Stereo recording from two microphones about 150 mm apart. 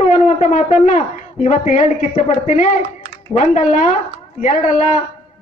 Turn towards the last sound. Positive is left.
turn(degrees=55)  # may be behind; listen again after turning